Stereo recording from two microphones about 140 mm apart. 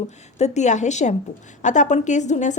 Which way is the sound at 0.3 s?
55° left (ahead or behind).